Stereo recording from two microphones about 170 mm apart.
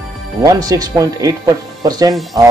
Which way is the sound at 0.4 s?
20° right (ahead or behind).